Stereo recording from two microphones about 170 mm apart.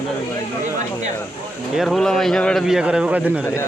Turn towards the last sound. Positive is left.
turn(degrees=-5)  # may be behind; listen again after turning